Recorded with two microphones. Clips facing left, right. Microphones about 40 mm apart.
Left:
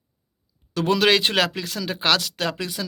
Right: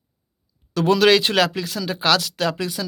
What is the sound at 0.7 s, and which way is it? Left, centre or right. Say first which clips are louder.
Speech: right 3 dB; left.